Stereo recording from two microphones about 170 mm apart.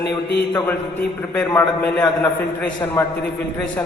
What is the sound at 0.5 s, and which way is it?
A man's voice, 15° left (ahead or behind).